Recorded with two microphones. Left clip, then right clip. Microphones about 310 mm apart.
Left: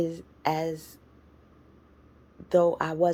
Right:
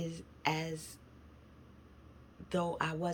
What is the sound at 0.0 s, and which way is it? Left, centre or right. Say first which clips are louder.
Speech: left 8 dB; centre.